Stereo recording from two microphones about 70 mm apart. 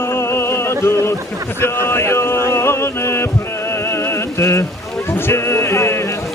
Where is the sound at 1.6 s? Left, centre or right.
Left.